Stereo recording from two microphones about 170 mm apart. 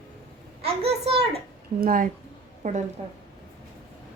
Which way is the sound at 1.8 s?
55° right (ahead or behind).